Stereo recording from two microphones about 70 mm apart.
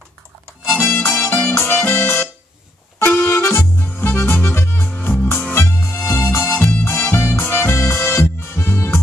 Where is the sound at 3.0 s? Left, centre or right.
Left.